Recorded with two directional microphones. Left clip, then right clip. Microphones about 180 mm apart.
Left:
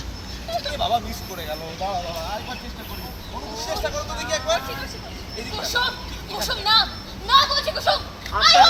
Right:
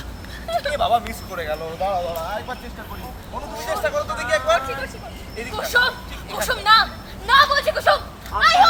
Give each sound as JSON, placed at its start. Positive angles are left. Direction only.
{"t": 0.5, "sound": "speech", "side_deg": 0}
{"t": 3.5, "sound": "speech", "side_deg": 0}
{"t": 8.3, "sound": "duck", "side_deg": -55}